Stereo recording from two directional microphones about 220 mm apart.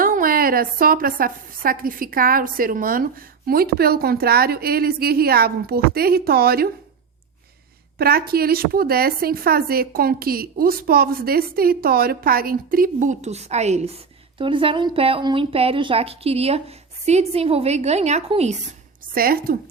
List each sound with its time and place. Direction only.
0.0 s a woman's voice: 40° right (ahead or behind)
7.9 s speech: 45° right (ahead or behind)
19.1 s speech: 40° right (ahead or behind)